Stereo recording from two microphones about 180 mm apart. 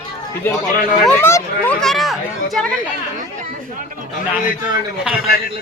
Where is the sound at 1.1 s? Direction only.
15° left (ahead or behind).